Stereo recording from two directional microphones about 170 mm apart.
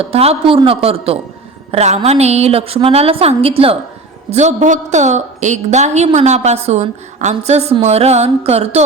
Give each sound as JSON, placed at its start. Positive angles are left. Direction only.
{"t": 0.0, "sound": "a woman's voice", "side_deg": -35}